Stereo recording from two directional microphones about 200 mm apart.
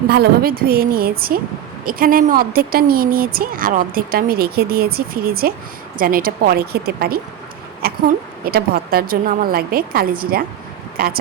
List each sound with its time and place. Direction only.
0.1 s speech: 50° right (ahead or behind)